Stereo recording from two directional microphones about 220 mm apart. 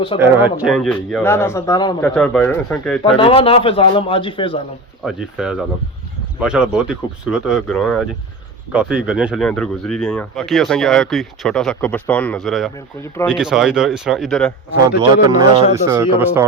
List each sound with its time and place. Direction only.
0.2 s speech: 10° right (ahead or behind)
1.2 s speech: 10° left (ahead or behind)
2.0 s speech: 5° left (ahead or behind)
3.0 s a man's voice: 25° left (ahead or behind)
5.0 s speech: 5° right (ahead or behind)
15.3 s speech: 20° right (ahead or behind)